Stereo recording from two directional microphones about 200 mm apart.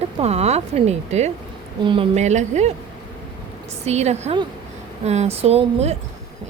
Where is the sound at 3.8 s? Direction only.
35° right (ahead or behind).